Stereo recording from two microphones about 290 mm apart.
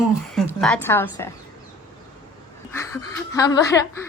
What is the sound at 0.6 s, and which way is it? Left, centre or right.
Speech, centre.